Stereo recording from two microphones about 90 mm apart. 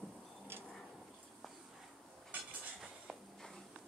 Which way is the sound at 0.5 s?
25° right (ahead or behind).